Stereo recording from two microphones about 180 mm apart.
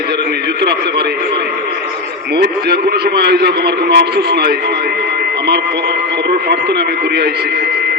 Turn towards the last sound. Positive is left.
turn(degrees=-70)  # may be behind; listen again after turning